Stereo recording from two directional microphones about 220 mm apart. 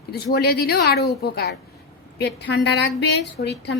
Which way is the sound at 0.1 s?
45° left (ahead or behind).